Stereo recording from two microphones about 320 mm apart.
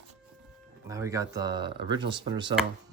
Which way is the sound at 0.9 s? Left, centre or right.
Centre.